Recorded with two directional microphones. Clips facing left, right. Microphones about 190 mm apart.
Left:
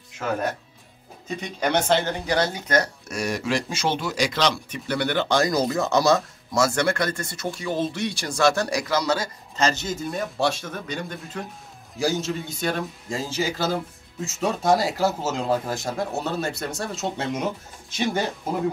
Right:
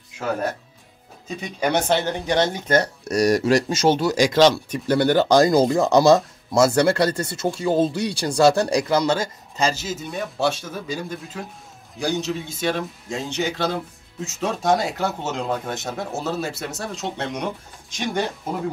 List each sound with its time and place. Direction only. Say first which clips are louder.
1.4 s speech: right 2 dB; 15° right (ahead or behind)
3.1 s speech: right 8 dB; 40° right (ahead or behind)
9.6 s a man's voice: even; 5° right (ahead or behind)